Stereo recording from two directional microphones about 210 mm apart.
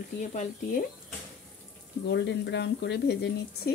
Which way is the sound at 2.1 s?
55° left (ahead or behind).